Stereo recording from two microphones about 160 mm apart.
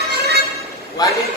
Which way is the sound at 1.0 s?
25° left (ahead or behind).